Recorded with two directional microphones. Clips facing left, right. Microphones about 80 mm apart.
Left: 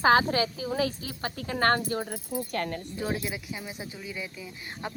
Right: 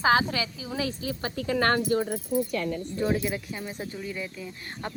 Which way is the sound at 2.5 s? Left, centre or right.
Left.